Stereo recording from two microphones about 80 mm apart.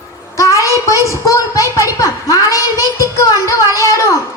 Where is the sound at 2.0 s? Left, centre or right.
Left.